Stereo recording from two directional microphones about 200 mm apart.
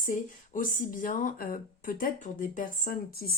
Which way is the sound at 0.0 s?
40° left (ahead or behind).